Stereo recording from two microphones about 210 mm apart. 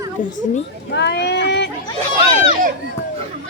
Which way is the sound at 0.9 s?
55° left (ahead or behind).